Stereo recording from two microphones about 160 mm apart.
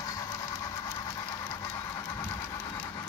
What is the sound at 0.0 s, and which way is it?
Train, 20° left (ahead or behind).